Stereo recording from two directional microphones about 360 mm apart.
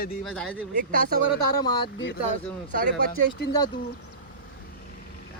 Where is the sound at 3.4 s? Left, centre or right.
Left.